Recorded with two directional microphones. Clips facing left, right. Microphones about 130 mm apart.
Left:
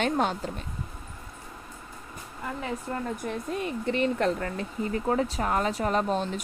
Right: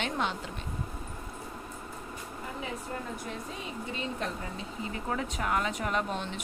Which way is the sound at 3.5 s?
60° left (ahead or behind).